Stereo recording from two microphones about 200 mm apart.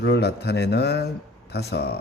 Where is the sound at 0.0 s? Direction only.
55° left (ahead or behind).